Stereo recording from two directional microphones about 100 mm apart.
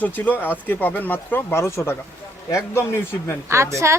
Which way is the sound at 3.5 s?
30° right (ahead or behind).